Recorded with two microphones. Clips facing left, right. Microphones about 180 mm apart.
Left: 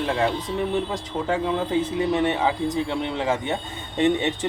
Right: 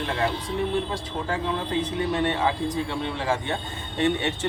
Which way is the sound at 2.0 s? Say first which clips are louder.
Left 2 dB; 20° left (ahead or behind).